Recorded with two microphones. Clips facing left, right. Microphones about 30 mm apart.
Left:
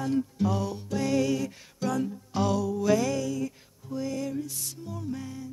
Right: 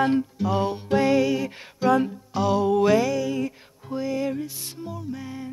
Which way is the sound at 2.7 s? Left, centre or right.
Right.